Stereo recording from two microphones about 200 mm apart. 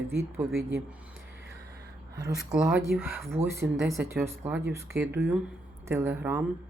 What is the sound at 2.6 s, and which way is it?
Speech, centre (ahead or behind).